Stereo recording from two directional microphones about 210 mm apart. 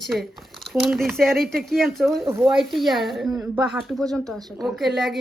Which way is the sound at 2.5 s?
Centre (ahead or behind).